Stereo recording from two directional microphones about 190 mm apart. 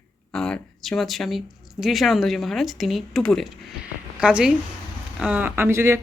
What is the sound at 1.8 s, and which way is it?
Speech, centre (ahead or behind).